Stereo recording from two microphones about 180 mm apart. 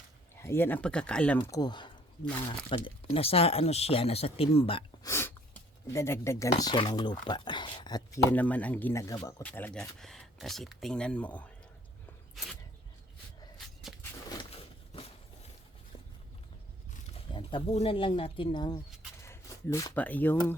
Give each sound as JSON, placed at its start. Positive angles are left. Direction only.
{"t": 0.4, "sound": "speech", "side_deg": 15}
{"t": 1.5, "sound": "speech", "side_deg": 20}
{"t": 5.0, "sound": "speech", "side_deg": 15}
{"t": 17.3, "sound": "speech", "side_deg": 30}